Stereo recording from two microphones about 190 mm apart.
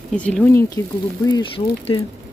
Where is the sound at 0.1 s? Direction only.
5° left (ahead or behind).